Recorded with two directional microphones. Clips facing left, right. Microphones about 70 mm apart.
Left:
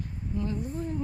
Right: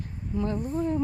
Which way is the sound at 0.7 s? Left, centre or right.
Right.